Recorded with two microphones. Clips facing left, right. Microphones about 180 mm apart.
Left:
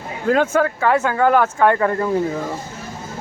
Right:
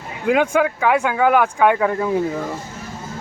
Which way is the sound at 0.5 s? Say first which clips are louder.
Even; 5° right (ahead or behind).